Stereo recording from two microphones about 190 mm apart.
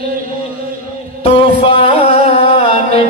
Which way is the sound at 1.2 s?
30° left (ahead or behind).